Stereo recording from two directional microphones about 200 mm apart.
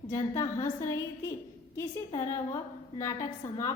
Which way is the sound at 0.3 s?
15° left (ahead or behind).